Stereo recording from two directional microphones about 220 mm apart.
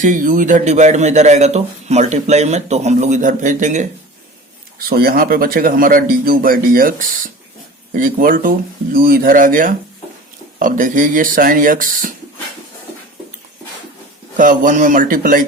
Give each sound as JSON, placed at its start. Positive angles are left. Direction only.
{"t": 0.0, "sound": "speech", "side_deg": -35}
{"t": 4.9, "sound": "speech", "side_deg": -45}
{"t": 7.9, "sound": "speech", "side_deg": -40}
{"t": 14.3, "sound": "speech", "side_deg": -35}